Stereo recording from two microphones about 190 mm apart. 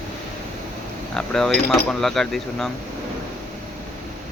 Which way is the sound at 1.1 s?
5° left (ahead or behind).